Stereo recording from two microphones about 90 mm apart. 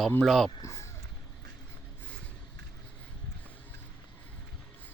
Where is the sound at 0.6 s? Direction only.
30° left (ahead or behind).